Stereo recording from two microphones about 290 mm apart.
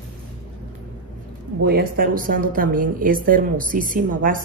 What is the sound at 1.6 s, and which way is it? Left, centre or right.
A woman's voice, right.